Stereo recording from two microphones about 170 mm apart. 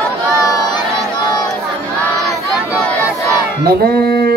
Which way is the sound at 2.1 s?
Centre (ahead or behind).